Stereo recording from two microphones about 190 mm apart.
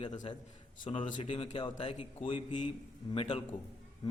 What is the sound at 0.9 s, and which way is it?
A man's voice, 30° left (ahead or behind).